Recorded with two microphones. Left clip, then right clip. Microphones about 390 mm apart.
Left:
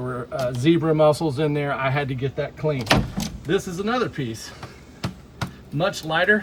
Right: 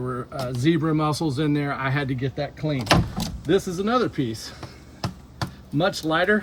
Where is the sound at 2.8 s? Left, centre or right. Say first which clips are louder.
Right 2 dB; centre.